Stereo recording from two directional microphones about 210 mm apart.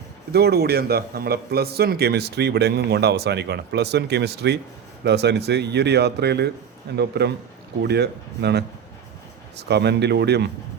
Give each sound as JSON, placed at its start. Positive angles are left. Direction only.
{"t": 0.3, "sound": "a man's voice", "side_deg": -50}